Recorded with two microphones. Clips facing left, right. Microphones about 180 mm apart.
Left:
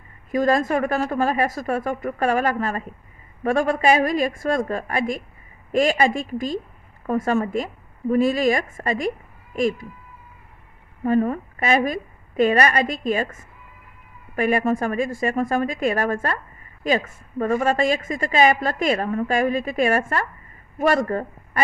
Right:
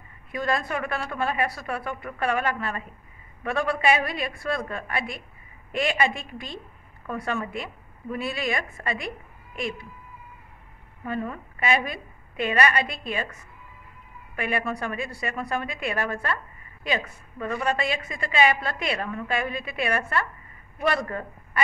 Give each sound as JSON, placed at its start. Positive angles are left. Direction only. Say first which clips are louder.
{"t": 0.3, "sound": "a woman's voice", "louder": "left 8 dB", "side_deg": 40}
{"t": 11.1, "sound": "a woman's voice", "louder": "left 11 dB", "side_deg": 40}